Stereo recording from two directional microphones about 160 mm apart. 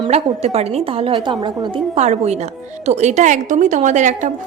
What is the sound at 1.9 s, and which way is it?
A woman's voice, 45° right (ahead or behind).